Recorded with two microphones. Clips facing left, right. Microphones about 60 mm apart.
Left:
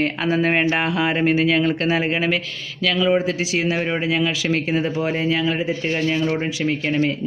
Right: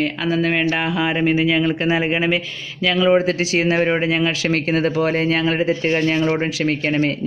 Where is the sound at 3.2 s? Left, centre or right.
Right.